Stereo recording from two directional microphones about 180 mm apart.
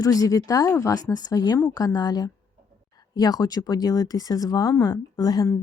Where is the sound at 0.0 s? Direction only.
20° left (ahead or behind).